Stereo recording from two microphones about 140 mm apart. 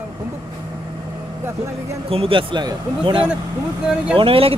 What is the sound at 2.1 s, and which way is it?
Speech, 40° right (ahead or behind).